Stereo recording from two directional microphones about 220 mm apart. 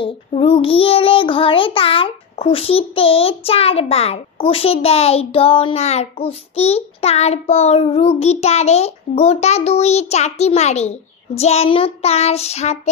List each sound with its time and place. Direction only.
0.0 s child singing: 25° left (ahead or behind)